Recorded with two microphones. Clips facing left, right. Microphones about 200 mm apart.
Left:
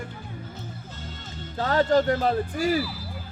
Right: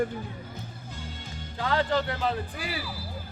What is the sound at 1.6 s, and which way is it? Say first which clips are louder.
Speech: left 5 dB; 45° left (ahead or behind).